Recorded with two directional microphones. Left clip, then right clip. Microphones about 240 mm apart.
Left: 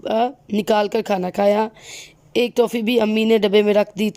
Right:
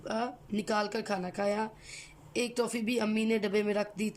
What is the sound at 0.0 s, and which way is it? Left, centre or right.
A woman's voice, left.